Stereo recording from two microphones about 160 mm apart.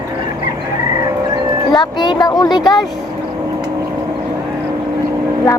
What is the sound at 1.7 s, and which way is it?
Speech, 25° left (ahead or behind).